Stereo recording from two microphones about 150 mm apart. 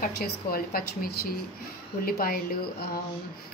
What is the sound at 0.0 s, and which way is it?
A woman's voice, 85° left.